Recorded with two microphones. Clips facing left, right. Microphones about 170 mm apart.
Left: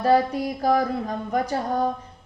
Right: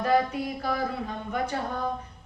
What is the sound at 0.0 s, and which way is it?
Speech, 35° left (ahead or behind).